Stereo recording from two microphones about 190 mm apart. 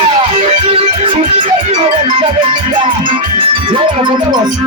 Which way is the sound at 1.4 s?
30° right (ahead or behind).